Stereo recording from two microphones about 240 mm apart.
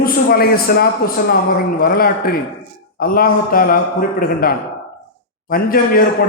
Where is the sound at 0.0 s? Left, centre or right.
Left.